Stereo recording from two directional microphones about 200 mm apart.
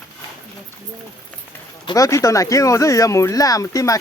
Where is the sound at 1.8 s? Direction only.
15° left (ahead or behind).